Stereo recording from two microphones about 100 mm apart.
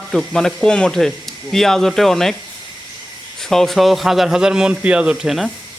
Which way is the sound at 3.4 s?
5° left (ahead or behind).